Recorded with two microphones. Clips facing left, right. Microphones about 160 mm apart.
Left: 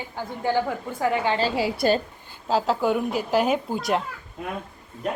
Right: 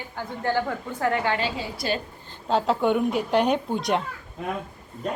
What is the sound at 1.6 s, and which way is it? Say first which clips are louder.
Speech: left 8 dB; 85° left.